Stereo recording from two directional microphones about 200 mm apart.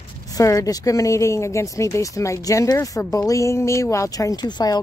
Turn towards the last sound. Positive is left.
turn(degrees=20)  # may be behind; listen again after turning